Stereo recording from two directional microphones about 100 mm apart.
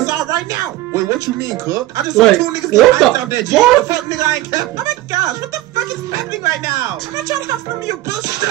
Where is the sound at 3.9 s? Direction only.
35° right (ahead or behind).